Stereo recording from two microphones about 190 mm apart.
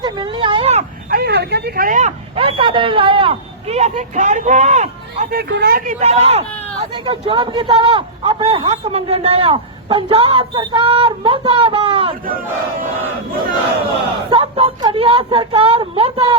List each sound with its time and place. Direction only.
0.0 s a sound: 25° right (ahead or behind)
1.1 s speech: 60° right (ahead or behind); by 5.3 s 35° right (ahead or behind)
5.3 s a man's voice: 60° right (ahead or behind); by 12.1 s 30° right (ahead or behind)
14.3 s a man's voice: 30° right (ahead or behind)